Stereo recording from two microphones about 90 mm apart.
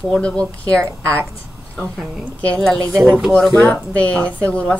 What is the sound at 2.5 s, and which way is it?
A woman's voice, 5° left (ahead or behind).